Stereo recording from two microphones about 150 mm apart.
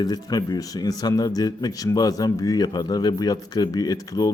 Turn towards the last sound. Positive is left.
turn(degrees=25)  # may be behind; listen again after turning